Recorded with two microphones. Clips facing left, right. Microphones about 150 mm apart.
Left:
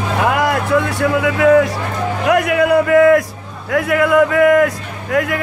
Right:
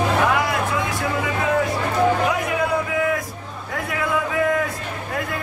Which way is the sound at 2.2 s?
70° left (ahead or behind).